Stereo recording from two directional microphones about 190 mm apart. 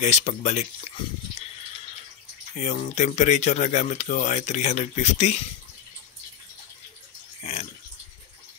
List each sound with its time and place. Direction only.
0.0 s speech: 40° left (ahead or behind)
2.5 s speech: 35° left (ahead or behind)
7.4 s pig: 35° left (ahead or behind)